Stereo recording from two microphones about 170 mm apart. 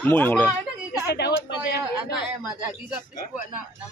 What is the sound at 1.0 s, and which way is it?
Speech, 75° left (ahead or behind).